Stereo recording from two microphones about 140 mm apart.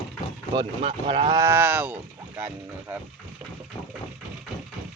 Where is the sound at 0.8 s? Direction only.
45° right (ahead or behind).